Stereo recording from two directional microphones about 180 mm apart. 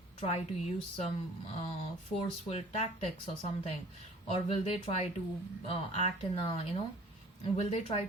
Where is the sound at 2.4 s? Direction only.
35° left (ahead or behind).